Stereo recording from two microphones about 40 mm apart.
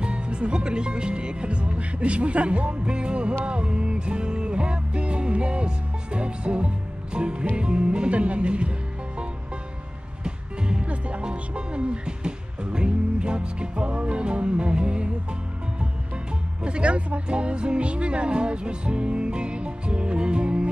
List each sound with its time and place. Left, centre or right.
0.0 s speech: right
3.4 s music: right
6.1 s speech: right
10.2 s speech: right
16.6 s speech: right